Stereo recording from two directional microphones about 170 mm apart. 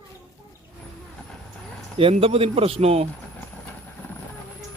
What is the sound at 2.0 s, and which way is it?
A man's voice, 35° right (ahead or behind).